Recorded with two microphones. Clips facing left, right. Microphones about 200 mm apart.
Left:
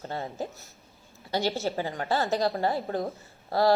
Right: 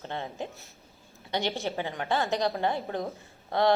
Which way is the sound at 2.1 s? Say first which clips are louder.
Left 1 dB; 5° left (ahead or behind).